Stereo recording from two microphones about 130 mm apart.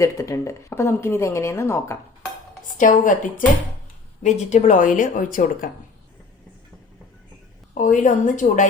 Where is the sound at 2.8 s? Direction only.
90° left.